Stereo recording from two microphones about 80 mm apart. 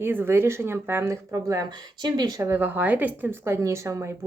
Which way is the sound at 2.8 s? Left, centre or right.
Right.